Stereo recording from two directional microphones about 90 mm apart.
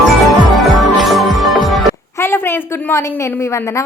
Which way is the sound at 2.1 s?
25° left (ahead or behind).